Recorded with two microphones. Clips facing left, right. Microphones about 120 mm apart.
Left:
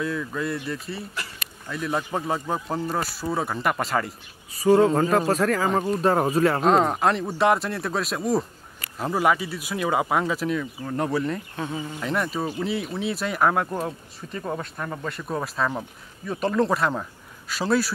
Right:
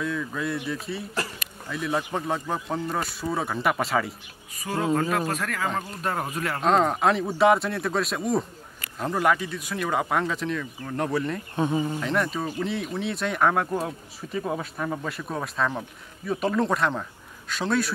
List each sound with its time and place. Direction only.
0.0 s speech: centre (ahead or behind)
4.6 s speech: 35° left (ahead or behind)
6.6 s speech: centre (ahead or behind)
11.5 s insect: 20° right (ahead or behind)
12.0 s speech: 5° left (ahead or behind)